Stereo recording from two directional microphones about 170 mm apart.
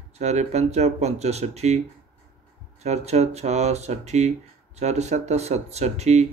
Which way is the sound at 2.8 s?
40° right (ahead or behind).